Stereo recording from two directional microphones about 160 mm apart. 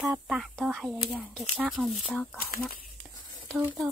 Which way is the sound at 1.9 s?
Centre (ahead or behind).